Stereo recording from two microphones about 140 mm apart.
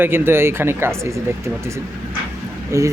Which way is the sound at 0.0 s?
15° right (ahead or behind).